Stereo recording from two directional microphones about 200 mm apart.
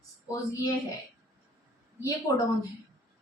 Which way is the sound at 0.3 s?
15° left (ahead or behind).